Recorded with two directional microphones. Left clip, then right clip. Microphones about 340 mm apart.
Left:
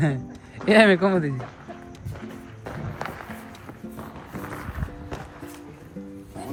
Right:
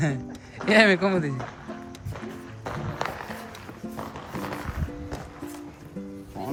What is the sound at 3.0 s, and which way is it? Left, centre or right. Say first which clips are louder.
Music: right 3 dB; right.